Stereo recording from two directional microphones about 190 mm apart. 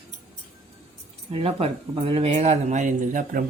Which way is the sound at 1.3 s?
30° right (ahead or behind).